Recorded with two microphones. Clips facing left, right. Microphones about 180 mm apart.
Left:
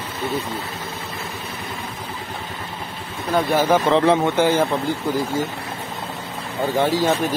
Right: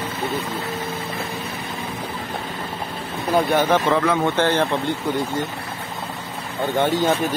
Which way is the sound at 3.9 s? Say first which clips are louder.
Left 3 dB; 30° left (ahead or behind).